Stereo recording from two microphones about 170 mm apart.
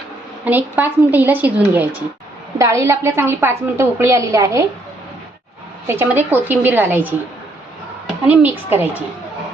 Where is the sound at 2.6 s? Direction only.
15° right (ahead or behind).